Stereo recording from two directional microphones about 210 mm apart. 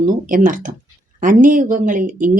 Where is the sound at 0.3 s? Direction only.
40° right (ahead or behind).